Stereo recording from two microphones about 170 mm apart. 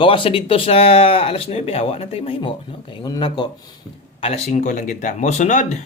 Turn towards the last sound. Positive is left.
turn(degrees=45)  # may be behind; listen again after turning